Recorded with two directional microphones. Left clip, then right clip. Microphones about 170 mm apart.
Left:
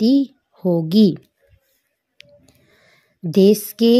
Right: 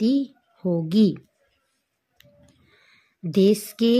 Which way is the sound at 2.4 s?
30° left (ahead or behind).